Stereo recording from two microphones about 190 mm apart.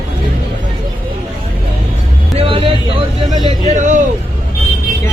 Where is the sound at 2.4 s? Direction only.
30° right (ahead or behind).